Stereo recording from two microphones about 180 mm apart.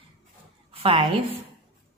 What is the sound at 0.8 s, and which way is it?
Speech, 30° right (ahead or behind).